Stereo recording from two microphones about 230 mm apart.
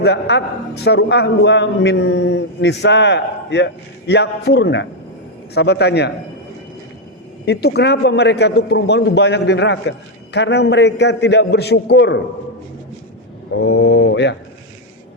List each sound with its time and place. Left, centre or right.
0.0 s a man's voice: left
7.4 s a man's voice: left
13.6 s a man's voice: left